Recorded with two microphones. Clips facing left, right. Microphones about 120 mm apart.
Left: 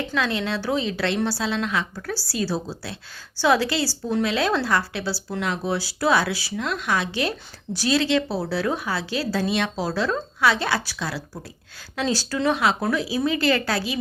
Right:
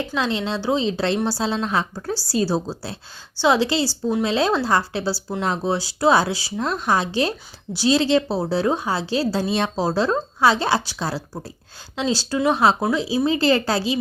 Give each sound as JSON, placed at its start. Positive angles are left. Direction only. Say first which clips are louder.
{"t": 0.1, "sound": "speech", "louder": "right 1 dB", "side_deg": -25}
{"t": 11.9, "sound": "speech", "louder": "right 2 dB", "side_deg": -20}
{"t": 12.5, "sound": "speech", "louder": "right 3 dB", "side_deg": -30}